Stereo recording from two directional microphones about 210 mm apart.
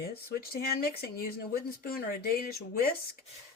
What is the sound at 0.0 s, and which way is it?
Speech, 45° left (ahead or behind).